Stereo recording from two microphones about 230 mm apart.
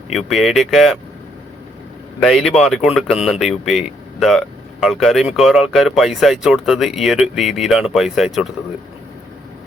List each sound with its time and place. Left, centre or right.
0.1 s speech: centre
2.2 s speech: centre